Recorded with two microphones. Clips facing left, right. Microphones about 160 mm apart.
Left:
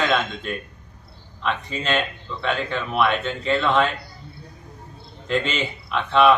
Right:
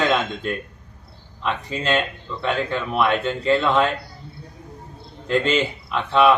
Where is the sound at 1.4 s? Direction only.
15° right (ahead or behind).